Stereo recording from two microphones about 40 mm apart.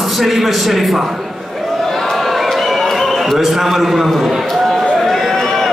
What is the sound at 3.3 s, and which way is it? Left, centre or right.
A man's voice, centre.